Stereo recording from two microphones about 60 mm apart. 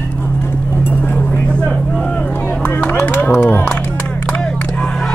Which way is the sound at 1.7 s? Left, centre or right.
Centre.